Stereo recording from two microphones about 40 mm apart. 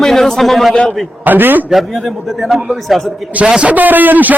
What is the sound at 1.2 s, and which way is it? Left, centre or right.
Speech, right.